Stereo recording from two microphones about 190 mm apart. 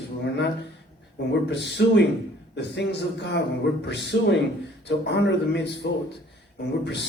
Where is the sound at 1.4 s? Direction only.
65° left (ahead or behind).